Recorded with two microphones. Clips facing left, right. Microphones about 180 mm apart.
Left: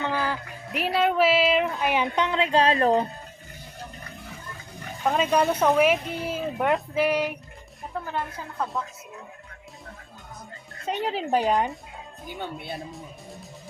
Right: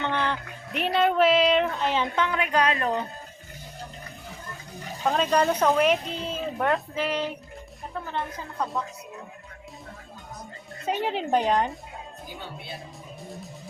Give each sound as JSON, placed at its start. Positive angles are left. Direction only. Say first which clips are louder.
{"t": 0.0, "sound": "speech", "louder": "even", "side_deg": 5}
{"t": 1.9, "sound": "speech", "louder": "left 1 dB", "side_deg": 15}
{"t": 5.0, "sound": "speech", "louder": "even", "side_deg": 5}
{"t": 10.8, "sound": "speech", "louder": "right 1 dB", "side_deg": 0}